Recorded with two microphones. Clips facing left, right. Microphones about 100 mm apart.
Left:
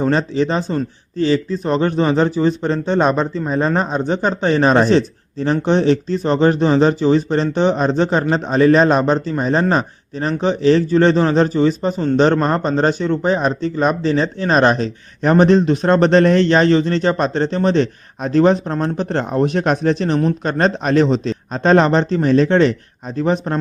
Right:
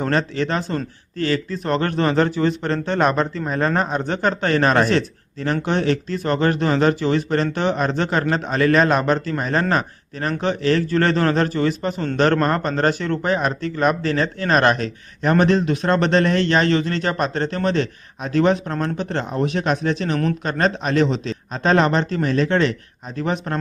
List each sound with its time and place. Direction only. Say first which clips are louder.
0.0 s speech: left 4 dB; 15° left (ahead or behind)
1.6 s speech: left 2 dB; 5° left (ahead or behind); by 23.6 s 30° left (ahead or behind)